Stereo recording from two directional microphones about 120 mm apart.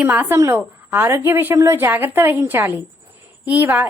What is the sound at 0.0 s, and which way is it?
A woman's voice, 15° right (ahead or behind).